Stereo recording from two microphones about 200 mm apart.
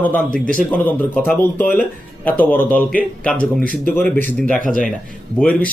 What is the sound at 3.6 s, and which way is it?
Speech, 45° right (ahead or behind).